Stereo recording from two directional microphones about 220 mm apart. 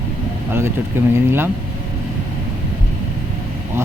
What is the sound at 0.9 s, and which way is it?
Speech, 10° right (ahead or behind).